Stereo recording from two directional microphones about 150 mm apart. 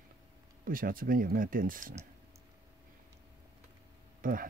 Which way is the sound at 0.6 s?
70° right (ahead or behind).